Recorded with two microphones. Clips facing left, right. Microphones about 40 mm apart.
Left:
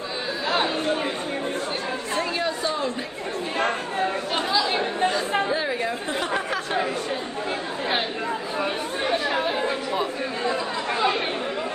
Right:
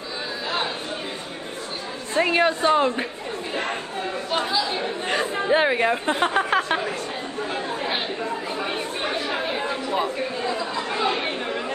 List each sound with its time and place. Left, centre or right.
2.1 s speech: right
4.3 s speech: centre
5.0 s speech: right